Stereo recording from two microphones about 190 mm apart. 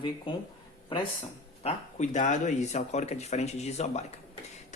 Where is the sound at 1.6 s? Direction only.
40° left (ahead or behind).